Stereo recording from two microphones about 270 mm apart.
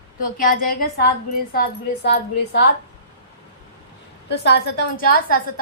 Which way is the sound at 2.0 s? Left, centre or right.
Left.